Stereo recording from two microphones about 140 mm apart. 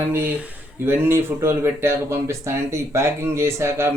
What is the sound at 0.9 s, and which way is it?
Speech, 15° right (ahead or behind).